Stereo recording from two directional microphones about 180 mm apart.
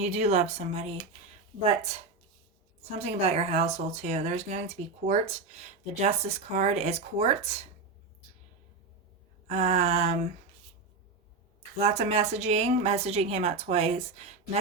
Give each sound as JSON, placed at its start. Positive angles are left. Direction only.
{"t": 0.0, "sound": "speech", "side_deg": -35}
{"t": 9.5, "sound": "speech", "side_deg": -40}
{"t": 11.8, "sound": "speech", "side_deg": -35}